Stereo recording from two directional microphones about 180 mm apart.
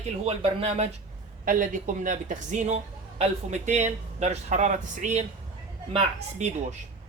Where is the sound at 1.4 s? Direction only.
45° right (ahead or behind).